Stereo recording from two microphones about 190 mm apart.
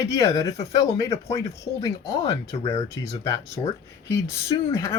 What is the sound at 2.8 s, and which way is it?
Speech, 15° left (ahead or behind).